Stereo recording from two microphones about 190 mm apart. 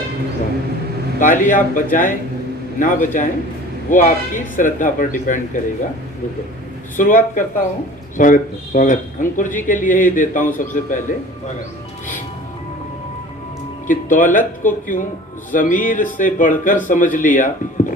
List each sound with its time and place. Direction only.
1.2 s speech: 45° left (ahead or behind)
6.9 s speech: 45° left (ahead or behind)
13.8 s speech: 45° left (ahead or behind)